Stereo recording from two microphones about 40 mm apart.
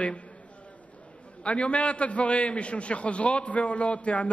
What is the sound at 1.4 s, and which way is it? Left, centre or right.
A man's voice, left.